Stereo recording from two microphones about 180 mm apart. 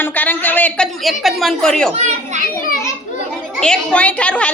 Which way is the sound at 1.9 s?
35° right (ahead or behind).